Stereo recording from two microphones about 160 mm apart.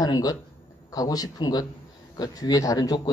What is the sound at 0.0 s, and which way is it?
Speech, 25° left (ahead or behind).